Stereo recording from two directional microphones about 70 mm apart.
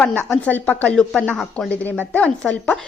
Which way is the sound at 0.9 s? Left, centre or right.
Centre.